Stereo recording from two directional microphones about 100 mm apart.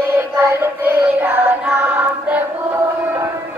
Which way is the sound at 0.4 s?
25° right (ahead or behind).